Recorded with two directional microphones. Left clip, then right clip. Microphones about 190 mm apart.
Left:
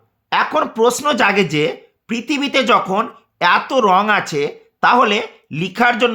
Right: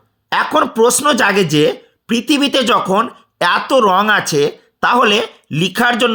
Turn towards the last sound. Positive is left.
turn(degrees=-15)  # may be behind; listen again after turning